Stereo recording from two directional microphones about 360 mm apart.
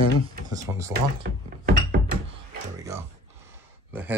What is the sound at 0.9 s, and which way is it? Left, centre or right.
Drawer open or close, right.